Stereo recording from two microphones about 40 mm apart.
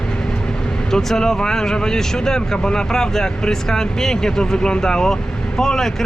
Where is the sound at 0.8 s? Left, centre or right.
Centre.